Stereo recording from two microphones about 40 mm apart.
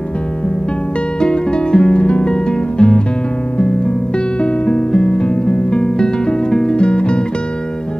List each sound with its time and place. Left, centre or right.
1.2 s music: centre